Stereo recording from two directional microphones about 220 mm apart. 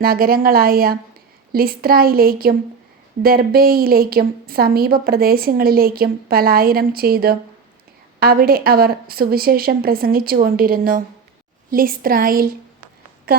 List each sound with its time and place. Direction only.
0.0 s a woman's voice: 40° right (ahead or behind)